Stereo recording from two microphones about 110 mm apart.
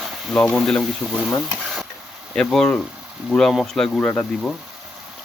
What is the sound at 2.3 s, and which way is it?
Speech, 5° left (ahead or behind).